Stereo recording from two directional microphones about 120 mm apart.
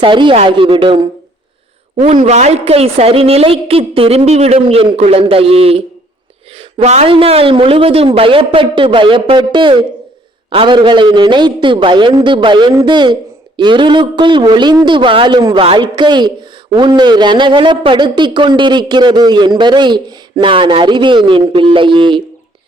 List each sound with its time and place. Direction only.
0.0 s a man's voice: 45° right (ahead or behind)
2.0 s a woman's voice: 70° right (ahead or behind); by 22.2 s 40° right (ahead or behind)